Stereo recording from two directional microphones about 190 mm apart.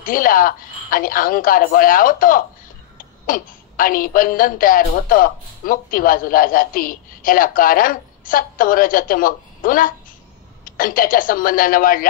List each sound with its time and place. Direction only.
0.0 s a woman's voice: 45° left (ahead or behind)